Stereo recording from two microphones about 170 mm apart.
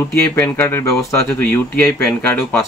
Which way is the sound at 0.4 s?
15° left (ahead or behind).